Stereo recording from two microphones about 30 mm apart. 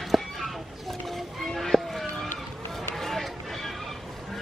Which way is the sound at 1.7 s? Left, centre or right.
Centre.